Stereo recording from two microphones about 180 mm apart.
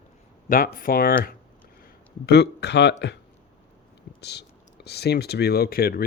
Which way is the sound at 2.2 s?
65° left (ahead or behind).